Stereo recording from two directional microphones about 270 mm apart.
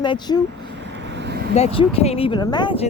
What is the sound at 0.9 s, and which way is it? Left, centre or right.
Vehicle, right.